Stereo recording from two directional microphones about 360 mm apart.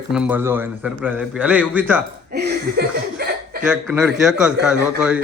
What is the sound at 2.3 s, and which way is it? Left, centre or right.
Chuckle, right.